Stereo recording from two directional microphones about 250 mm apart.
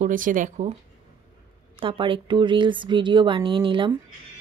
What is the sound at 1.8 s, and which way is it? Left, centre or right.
Speech, centre.